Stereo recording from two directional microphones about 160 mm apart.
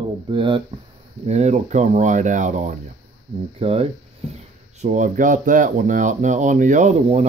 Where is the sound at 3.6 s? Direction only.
40° right (ahead or behind).